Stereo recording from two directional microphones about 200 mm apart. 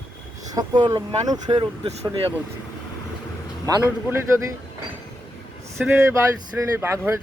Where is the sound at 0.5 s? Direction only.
20° right (ahead or behind).